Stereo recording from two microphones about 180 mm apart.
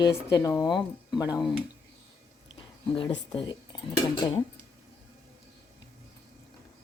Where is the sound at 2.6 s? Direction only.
25° left (ahead or behind).